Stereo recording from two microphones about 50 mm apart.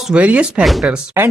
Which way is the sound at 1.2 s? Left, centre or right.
Right.